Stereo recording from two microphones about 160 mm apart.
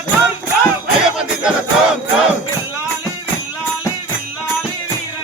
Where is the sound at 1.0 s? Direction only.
5° right (ahead or behind).